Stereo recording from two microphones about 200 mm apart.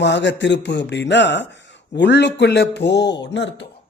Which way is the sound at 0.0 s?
60° left (ahead or behind).